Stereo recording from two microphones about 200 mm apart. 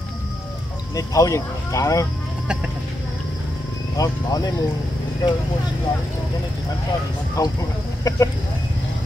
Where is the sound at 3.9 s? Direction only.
20° left (ahead or behind).